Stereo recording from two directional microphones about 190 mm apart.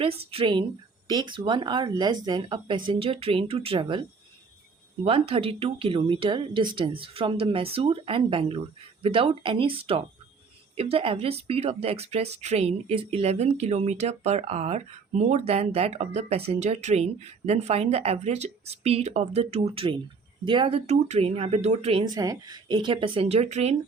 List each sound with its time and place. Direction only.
0.0 s speech: 30° right (ahead or behind)
5.0 s speech: 30° right (ahead or behind)
22.0 s speech: 20° right (ahead or behind)